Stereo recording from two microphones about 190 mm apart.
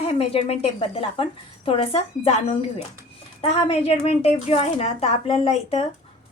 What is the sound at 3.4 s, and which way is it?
Speech, 30° left (ahead or behind).